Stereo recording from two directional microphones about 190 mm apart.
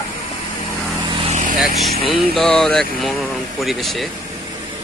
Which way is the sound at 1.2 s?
40° right (ahead or behind).